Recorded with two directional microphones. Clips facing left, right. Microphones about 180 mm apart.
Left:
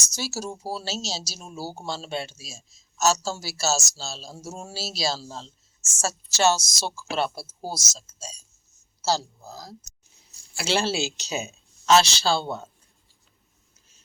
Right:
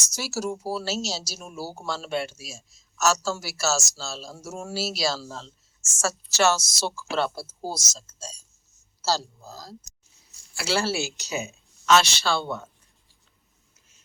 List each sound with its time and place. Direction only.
0.2 s speech: 25° left (ahead or behind)